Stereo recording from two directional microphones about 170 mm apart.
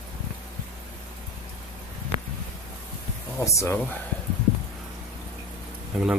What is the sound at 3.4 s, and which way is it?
Speech, 15° left (ahead or behind).